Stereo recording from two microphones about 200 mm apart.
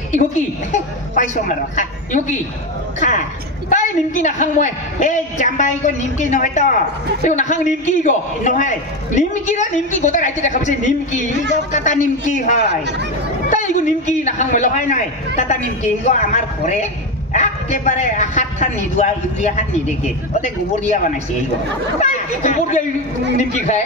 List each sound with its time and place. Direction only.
0.1 s a man's voice: 35° left (ahead or behind)